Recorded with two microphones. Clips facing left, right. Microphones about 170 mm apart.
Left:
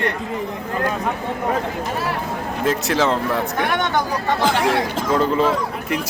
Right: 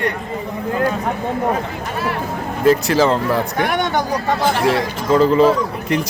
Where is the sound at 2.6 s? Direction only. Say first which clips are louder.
Right 6 dB; centre (ahead or behind).